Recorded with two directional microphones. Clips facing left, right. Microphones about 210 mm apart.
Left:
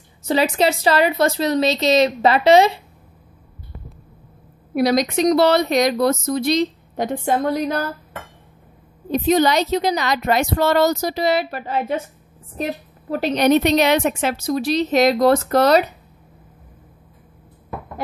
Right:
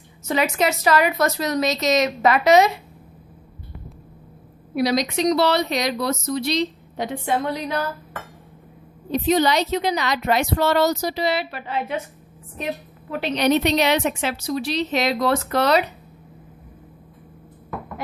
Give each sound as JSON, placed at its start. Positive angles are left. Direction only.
{"t": 0.2, "sound": "speech", "side_deg": 30}
{"t": 4.7, "sound": "a woman's voice", "side_deg": 50}
{"t": 9.1, "sound": "a woman's voice", "side_deg": 45}